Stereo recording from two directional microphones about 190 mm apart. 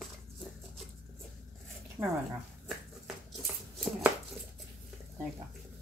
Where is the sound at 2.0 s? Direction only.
15° right (ahead or behind).